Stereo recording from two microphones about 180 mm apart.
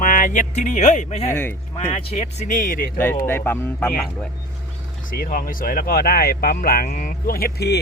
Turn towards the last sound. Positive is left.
turn(degrees=65)  # may be behind; listen again after turning